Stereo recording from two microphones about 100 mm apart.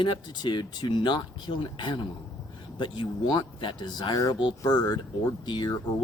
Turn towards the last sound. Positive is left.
turn(degrees=50)  # may be behind; listen again after turning